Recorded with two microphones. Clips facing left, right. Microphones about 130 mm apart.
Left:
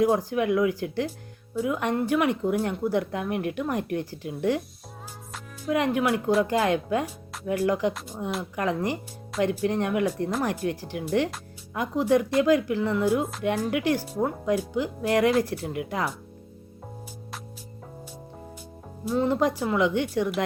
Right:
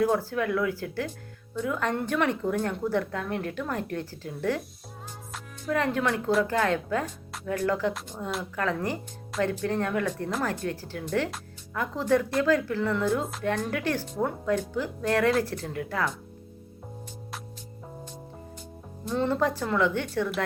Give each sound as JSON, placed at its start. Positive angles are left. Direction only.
{"t": 0.0, "sound": "speech", "side_deg": 15}
{"t": 5.6, "sound": "speech", "side_deg": 15}
{"t": 19.0, "sound": "speech", "side_deg": 10}